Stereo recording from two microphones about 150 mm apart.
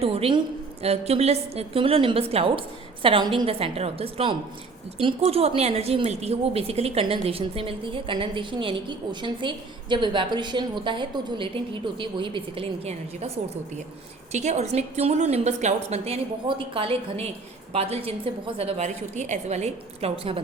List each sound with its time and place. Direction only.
0.0 s a woman's voice: 40° right (ahead or behind)
14.3 s a woman's voice: 50° right (ahead or behind)